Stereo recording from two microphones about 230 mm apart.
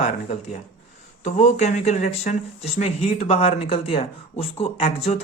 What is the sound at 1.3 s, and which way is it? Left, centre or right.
Speech, left.